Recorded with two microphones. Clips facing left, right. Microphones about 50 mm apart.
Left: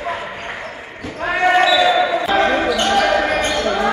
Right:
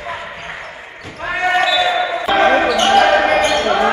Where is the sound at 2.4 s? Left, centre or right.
Right.